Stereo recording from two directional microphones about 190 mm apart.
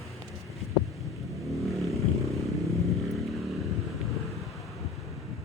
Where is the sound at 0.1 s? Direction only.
Centre (ahead or behind).